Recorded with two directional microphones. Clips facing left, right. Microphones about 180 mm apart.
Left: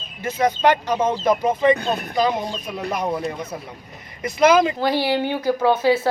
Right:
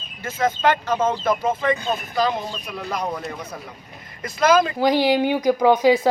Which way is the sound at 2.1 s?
15° left (ahead or behind).